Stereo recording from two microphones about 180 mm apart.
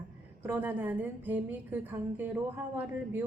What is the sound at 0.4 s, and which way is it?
A woman's voice, 10° right (ahead or behind).